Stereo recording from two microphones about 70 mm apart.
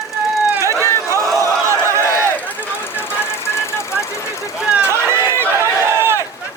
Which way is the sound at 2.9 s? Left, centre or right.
Left.